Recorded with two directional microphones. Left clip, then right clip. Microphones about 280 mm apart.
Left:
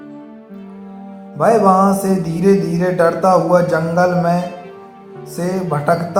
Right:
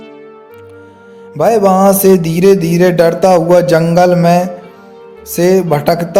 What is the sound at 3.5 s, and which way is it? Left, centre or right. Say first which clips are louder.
Speech: right 6 dB; right.